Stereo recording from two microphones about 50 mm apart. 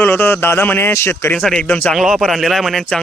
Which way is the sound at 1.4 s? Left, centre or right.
Centre.